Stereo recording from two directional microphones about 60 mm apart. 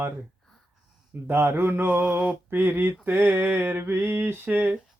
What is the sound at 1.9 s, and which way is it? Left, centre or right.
Mantra, right.